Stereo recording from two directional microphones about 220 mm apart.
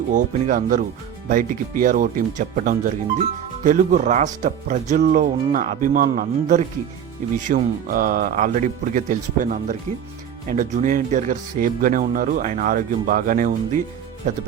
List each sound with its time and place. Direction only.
0.1 s speech: 35° right (ahead or behind)